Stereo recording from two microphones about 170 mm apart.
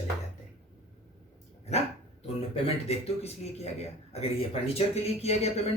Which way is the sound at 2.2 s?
35° left (ahead or behind).